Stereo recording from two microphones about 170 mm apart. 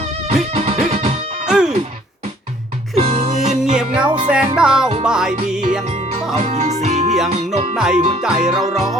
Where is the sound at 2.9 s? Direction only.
35° right (ahead or behind).